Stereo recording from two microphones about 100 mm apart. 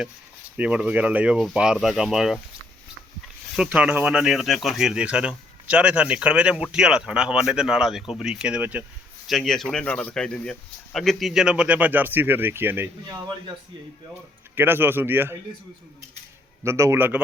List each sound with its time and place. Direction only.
0.5 s speech: 15° right (ahead or behind)
3.5 s speech: 5° right (ahead or behind)
9.2 s speech: centre (ahead or behind); by 12.9 s 20° right (ahead or behind)
14.5 s speech: 20° right (ahead or behind)
16.6 s speech: 30° right (ahead or behind)